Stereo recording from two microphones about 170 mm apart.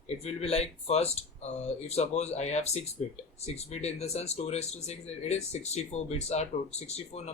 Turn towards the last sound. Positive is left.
turn(degrees=40)  # may be behind; listen again after turning